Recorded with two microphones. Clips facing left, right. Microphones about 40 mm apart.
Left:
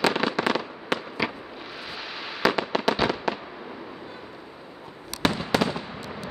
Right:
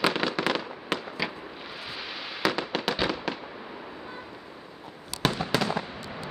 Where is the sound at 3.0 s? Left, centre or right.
Centre.